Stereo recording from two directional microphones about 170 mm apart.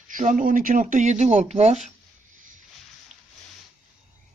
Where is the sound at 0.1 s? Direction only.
50° right (ahead or behind).